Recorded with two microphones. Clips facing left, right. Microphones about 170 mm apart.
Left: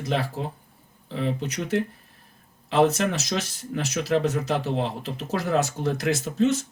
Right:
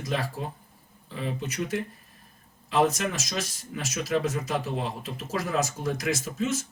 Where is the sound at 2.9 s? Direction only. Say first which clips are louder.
Left 5 dB; 65° left (ahead or behind).